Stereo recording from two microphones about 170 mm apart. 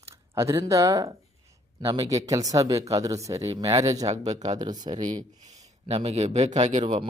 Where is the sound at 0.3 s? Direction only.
15° right (ahead or behind).